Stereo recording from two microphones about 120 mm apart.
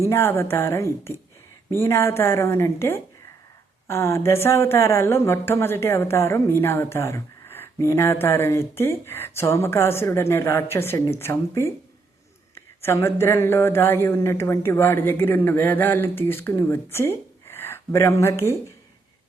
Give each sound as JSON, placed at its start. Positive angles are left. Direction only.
{"t": 0.0, "sound": "speech", "side_deg": 20}